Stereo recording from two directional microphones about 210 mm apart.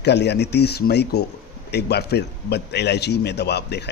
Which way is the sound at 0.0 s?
55° left (ahead or behind).